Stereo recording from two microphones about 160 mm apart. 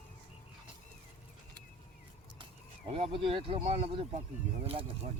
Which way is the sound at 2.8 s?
40° right (ahead or behind).